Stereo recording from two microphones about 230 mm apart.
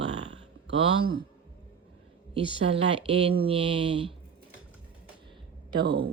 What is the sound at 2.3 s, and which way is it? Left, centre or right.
Speech, right.